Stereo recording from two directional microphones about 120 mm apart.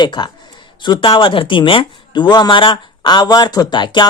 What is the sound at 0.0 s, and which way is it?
Speech, 40° left (ahead or behind).